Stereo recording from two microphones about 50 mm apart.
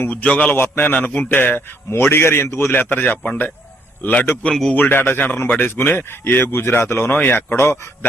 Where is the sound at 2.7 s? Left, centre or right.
Left.